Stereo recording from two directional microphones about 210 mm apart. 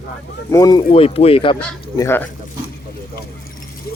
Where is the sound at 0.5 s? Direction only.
20° left (ahead or behind).